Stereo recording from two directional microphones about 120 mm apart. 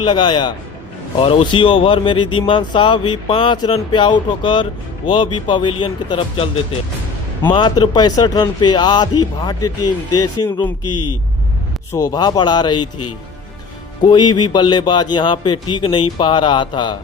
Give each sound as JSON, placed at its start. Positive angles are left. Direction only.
{"t": 0.0, "sound": "speech", "side_deg": 45}
{"t": 7.5, "sound": "speech", "side_deg": 35}
{"t": 11.9, "sound": "speech", "side_deg": 30}
{"t": 14.0, "sound": "speech", "side_deg": 35}